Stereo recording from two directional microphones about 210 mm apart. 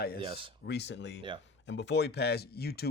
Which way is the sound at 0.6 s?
55° left (ahead or behind).